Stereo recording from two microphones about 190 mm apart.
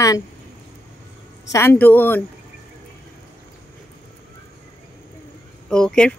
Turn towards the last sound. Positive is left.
turn(degrees=5)  # may be behind; listen again after turning